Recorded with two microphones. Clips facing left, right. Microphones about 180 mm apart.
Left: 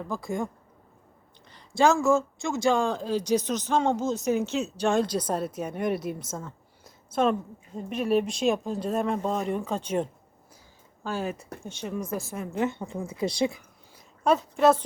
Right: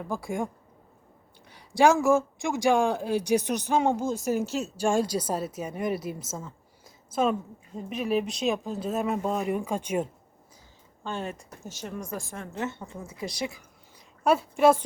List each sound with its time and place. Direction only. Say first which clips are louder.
0.0 s speech: even; 10° right (ahead or behind)
7.8 s speech: left 3 dB; centre (ahead or behind)
11.0 s speech: left 3 dB; 5° left (ahead or behind)
12.5 s a woman's voice: left 6 dB; 15° left (ahead or behind)
14.3 s speech: even; 10° right (ahead or behind)